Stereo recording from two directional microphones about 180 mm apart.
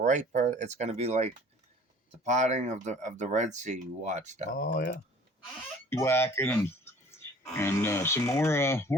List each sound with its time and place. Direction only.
0.0 s speech: 45° right (ahead or behind)
4.5 s speech: 55° left (ahead or behind)
5.9 s speech: 15° left (ahead or behind)